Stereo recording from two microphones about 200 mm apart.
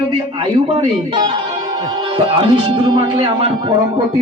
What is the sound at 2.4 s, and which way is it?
Speech, 25° right (ahead or behind).